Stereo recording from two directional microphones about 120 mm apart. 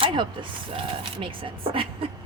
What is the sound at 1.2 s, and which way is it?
Speech, 45° right (ahead or behind).